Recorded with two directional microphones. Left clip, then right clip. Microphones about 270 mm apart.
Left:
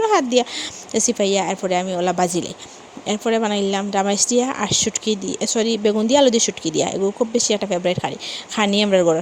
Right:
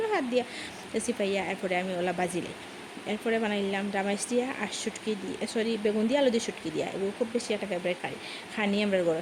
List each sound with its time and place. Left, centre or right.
0.0 s speech: left